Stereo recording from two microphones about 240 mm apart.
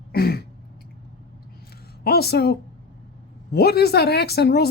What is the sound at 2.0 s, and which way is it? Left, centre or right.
Speech, left.